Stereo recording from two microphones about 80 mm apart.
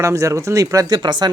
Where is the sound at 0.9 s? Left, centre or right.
Right.